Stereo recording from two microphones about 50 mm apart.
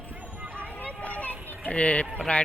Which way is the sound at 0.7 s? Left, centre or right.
Left.